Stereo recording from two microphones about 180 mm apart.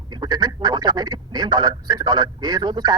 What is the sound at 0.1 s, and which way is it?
A man's voice, 25° right (ahead or behind).